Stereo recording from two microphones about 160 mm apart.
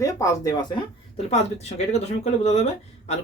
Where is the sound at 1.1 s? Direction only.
45° left (ahead or behind).